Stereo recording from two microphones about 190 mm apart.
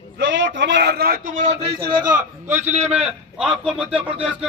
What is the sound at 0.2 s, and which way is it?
Speech, 70° right (ahead or behind).